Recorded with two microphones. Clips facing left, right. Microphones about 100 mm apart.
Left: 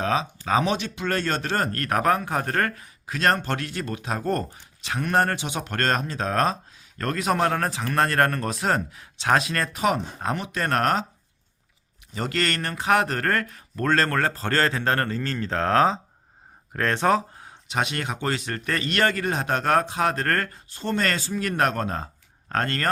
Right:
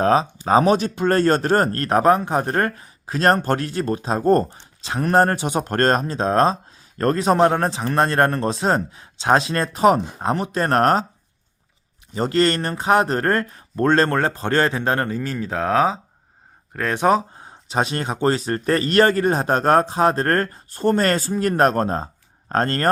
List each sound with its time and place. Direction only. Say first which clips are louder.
0.0 s speech: right 7 dB; 40° right (ahead or behind)
12.1 s speech: right 8 dB; 30° right (ahead or behind)
20.7 s speech: right 7 dB; 45° right (ahead or behind)